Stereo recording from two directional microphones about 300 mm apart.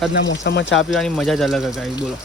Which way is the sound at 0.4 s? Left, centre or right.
Left.